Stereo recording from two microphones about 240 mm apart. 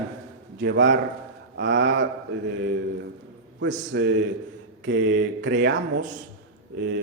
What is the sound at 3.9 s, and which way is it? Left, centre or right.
Speech, right.